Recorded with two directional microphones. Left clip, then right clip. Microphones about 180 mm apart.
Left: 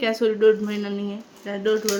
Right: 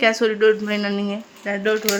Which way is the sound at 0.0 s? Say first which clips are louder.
Right 2 dB; 30° right (ahead or behind).